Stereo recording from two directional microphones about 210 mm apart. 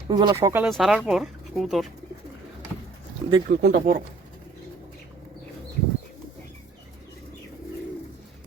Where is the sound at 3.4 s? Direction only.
40° right (ahead or behind).